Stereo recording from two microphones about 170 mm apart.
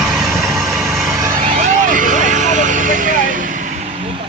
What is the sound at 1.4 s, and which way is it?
Vehicle, 45° right (ahead or behind).